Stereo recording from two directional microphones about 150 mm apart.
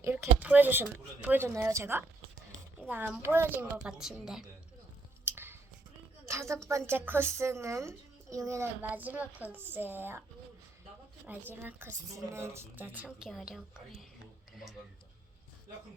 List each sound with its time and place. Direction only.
0.0 s a child's voice: 20° right (ahead or behind)
3.2 s a child's voice: 15° right (ahead or behind)
5.2 s scissors: 15° right (ahead or behind)
6.2 s a woman's voice: 20° right (ahead or behind)
11.3 s a child's voice: 15° right (ahead or behind)
14.5 s tick-tock: centre (ahead or behind)